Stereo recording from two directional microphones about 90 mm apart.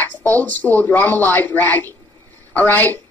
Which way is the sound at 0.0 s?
20° left (ahead or behind).